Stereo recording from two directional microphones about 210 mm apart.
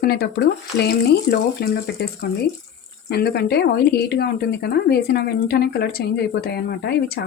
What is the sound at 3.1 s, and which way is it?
Speech, 50° left (ahead or behind).